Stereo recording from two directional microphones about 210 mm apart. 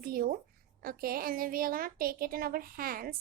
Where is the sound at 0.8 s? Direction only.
45° right (ahead or behind).